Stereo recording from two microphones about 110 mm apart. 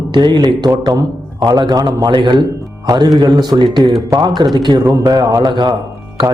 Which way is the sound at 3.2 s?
40° right (ahead or behind).